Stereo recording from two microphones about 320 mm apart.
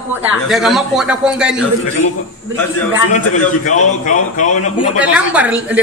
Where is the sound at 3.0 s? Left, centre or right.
Left.